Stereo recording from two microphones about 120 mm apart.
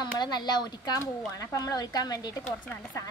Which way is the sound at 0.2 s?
35° left (ahead or behind).